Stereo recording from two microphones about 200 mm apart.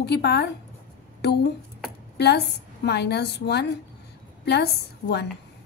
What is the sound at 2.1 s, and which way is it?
A woman's voice, 55° left (ahead or behind).